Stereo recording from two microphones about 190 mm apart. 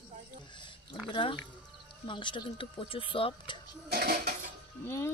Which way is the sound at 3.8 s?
55° right (ahead or behind).